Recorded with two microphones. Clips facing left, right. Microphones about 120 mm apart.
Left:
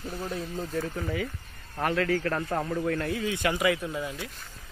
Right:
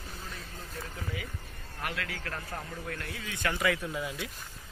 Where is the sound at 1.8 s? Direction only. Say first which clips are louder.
Left 12 dB; 40° left (ahead or behind); by 3.0 s 60° left (ahead or behind).